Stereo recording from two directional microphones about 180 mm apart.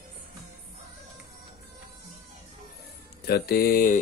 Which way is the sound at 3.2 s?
60° left (ahead or behind).